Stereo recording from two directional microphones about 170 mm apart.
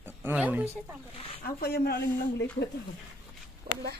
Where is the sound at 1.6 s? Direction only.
65° left (ahead or behind).